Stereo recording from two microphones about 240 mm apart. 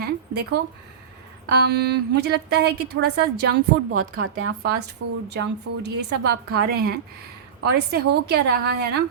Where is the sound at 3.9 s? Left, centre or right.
Right.